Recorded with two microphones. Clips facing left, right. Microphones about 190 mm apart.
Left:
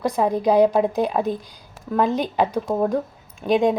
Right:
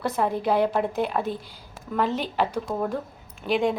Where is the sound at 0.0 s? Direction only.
15° left (ahead or behind).